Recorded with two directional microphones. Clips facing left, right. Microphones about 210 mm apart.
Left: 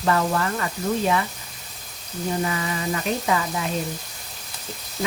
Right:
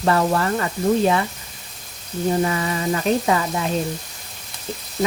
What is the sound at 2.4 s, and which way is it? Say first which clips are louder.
Sizzle: right 4 dB; 40° right (ahead or behind).